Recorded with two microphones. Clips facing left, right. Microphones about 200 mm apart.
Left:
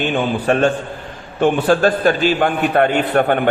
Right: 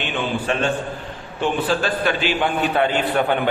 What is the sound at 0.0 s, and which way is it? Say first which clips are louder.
A man's voice: left 6 dB; 45° left (ahead or behind).